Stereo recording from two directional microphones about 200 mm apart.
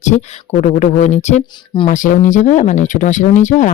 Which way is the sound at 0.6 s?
35° left (ahead or behind).